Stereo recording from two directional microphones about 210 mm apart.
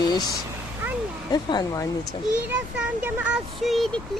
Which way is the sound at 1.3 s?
20° left (ahead or behind).